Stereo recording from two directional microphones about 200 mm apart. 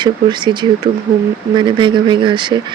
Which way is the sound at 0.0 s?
20° right (ahead or behind).